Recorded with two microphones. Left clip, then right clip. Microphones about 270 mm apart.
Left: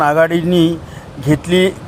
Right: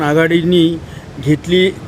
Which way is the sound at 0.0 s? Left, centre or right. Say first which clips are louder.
Left 1 dB; centre.